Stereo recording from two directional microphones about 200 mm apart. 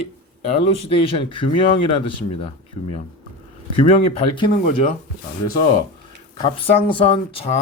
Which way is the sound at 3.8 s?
30° left (ahead or behind).